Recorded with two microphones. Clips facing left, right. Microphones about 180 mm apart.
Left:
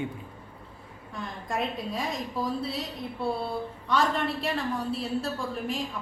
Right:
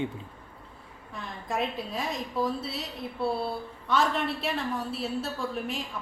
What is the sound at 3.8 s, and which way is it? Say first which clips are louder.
A woman's voice: even; centre (ahead or behind).